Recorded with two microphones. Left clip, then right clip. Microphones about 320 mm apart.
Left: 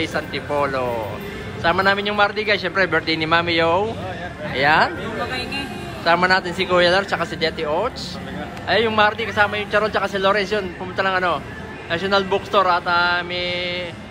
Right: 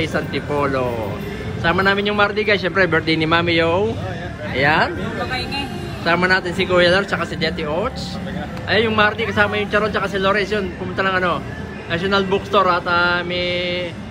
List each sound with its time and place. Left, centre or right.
0.0 s a man's voice: centre